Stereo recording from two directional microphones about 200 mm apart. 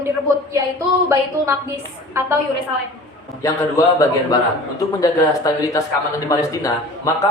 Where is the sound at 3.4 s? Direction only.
15° left (ahead or behind).